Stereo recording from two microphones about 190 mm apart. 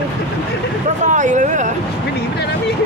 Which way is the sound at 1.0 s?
40° right (ahead or behind).